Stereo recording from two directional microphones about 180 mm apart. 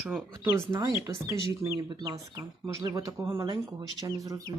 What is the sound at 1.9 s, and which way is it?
Speech, 25° right (ahead or behind).